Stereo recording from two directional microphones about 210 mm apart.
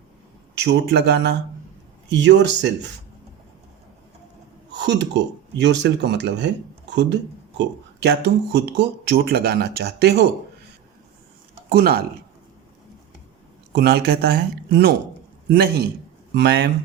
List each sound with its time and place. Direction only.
0.5 s speech: 55° right (ahead or behind)
4.7 s speech: 55° right (ahead or behind)
11.7 s speech: 45° right (ahead or behind)
13.7 s speech: 50° right (ahead or behind)